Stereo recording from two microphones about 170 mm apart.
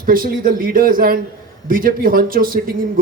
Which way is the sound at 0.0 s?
55° right (ahead or behind).